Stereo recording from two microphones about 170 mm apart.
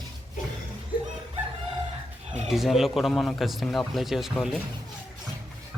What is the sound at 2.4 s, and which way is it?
Speech, centre (ahead or behind).